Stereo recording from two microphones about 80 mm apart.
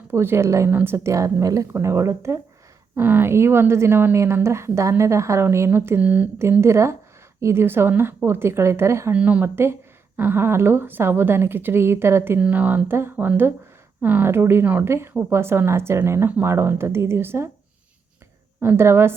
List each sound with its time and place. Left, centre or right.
0.1 s speech: right
2.9 s speech: right
6.0 s speech: centre
6.6 s speech: right
9.1 s speech: centre
10.2 s a woman's voice: right
12.4 s a woman's voice: right
18.6 s speech: right